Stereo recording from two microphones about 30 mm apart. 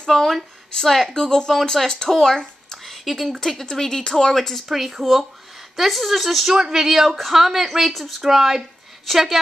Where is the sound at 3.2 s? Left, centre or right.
Centre.